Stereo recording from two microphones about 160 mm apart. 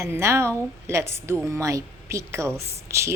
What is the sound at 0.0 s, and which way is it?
A woman's voice, 15° right (ahead or behind).